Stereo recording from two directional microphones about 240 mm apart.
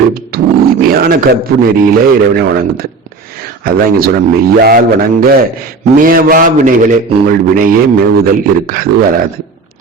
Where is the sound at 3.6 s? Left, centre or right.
Right.